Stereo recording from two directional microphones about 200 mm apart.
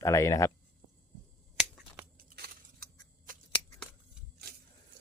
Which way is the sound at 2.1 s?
50° right (ahead or behind).